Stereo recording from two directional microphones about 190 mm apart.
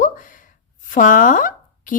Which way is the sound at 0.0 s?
45° left (ahead or behind).